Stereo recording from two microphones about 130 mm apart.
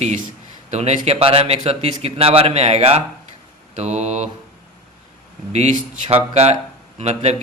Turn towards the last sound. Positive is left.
turn(degrees=-55)  # may be behind; listen again after turning